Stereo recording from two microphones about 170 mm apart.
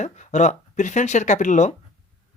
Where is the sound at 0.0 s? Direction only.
45° left (ahead or behind).